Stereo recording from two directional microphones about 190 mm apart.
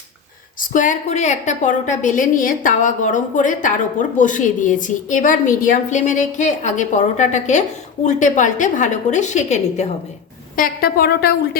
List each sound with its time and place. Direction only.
0.7 s a woman's voice: 40° left (ahead or behind)
10.5 s a woman's voice: 50° left (ahead or behind)